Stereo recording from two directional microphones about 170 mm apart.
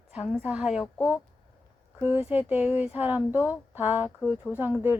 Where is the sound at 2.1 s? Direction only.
10° right (ahead or behind).